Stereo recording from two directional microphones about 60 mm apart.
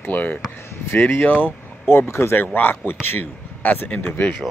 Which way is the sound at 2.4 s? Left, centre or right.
Left.